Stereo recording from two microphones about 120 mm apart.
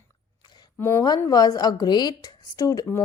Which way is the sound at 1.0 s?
35° left (ahead or behind).